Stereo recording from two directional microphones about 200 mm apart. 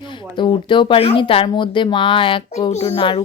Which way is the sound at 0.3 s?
25° left (ahead or behind).